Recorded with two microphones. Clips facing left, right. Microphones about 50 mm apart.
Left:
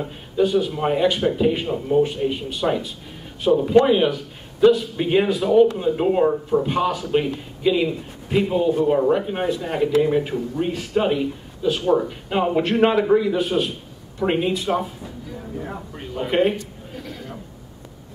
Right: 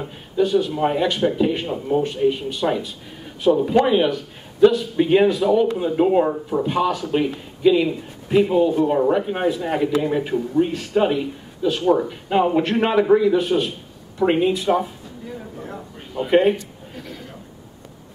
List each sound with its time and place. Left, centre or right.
0.0 s a man's voice: centre
15.6 s a man's voice: centre
16.3 s a sound: centre